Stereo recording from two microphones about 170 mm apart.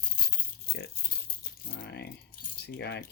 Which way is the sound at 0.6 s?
75° left (ahead or behind).